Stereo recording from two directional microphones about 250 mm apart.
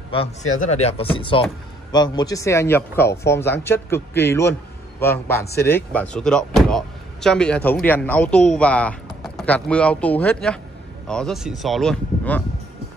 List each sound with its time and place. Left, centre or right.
0.1 s speech: left
5.7 s speech: centre